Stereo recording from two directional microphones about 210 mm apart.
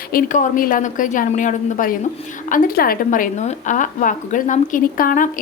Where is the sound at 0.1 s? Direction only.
40° left (ahead or behind).